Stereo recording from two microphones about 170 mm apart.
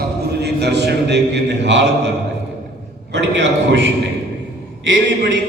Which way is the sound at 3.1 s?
90° right.